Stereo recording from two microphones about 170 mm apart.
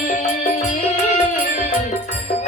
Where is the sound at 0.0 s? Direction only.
45° left (ahead or behind).